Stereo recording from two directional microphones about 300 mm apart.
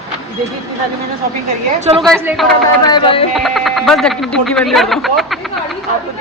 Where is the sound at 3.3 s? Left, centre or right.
Centre.